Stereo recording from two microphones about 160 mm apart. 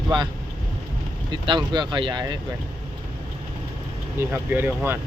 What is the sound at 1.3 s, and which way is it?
Speech, 30° right (ahead or behind).